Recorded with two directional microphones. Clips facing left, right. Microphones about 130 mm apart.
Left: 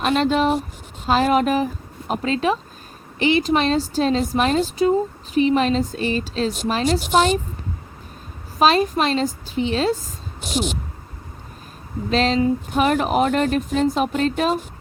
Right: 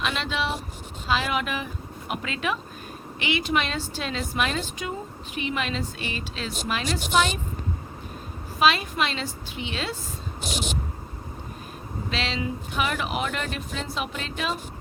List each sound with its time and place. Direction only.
0.0 s a woman's voice: 45° left (ahead or behind)
8.5 s a woman's voice: 40° left (ahead or behind)
12.1 s a woman's voice: 40° left (ahead or behind)